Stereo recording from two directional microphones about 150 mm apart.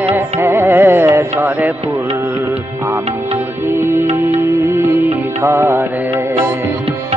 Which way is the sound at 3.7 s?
15° right (ahead or behind).